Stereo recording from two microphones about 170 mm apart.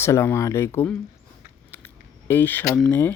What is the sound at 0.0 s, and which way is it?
Speech, 15° left (ahead or behind).